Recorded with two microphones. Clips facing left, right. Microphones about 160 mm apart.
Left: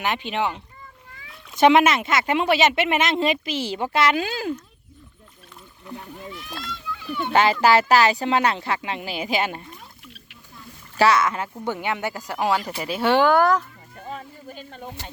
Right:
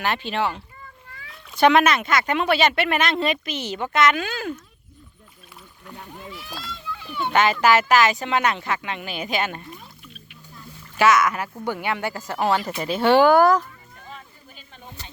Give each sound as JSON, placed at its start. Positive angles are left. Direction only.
{"t": 0.0, "sound": "speech", "side_deg": 15}
{"t": 7.3, "sound": "speech", "side_deg": 30}
{"t": 10.9, "sound": "speech", "side_deg": 30}
{"t": 14.1, "sound": "a sound", "side_deg": 45}